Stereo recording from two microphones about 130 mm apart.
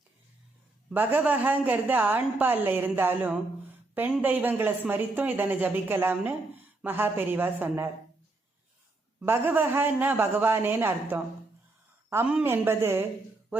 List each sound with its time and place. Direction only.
0.9 s a woman's voice: 10° right (ahead or behind)
9.2 s a woman's voice: 15° right (ahead or behind)
12.3 s a woman's voice: 15° right (ahead or behind)